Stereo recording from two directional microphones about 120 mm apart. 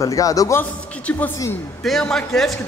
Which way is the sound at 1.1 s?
10° left (ahead or behind).